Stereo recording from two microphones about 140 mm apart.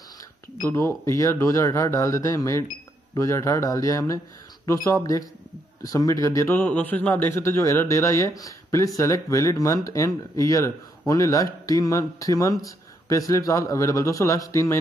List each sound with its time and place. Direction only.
0.6 s a man's voice: 20° left (ahead or behind)